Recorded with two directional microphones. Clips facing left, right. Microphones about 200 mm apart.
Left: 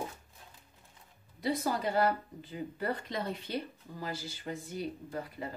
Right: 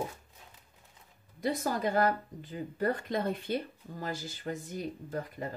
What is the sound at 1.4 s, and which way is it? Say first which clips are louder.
Speech: right 1 dB; 50° right (ahead or behind).